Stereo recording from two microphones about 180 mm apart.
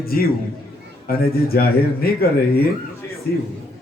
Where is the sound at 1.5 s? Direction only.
60° left (ahead or behind).